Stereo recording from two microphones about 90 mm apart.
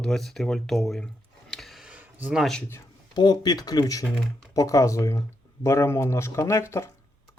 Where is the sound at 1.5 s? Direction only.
Centre (ahead or behind).